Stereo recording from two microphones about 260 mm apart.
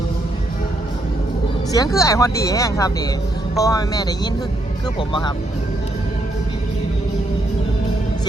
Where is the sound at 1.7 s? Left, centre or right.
Centre.